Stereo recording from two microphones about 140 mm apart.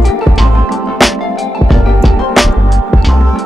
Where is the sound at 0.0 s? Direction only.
Centre (ahead or behind).